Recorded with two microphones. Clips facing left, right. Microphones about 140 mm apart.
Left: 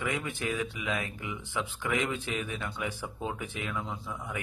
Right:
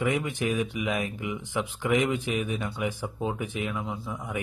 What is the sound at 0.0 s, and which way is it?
Speech, 20° right (ahead or behind).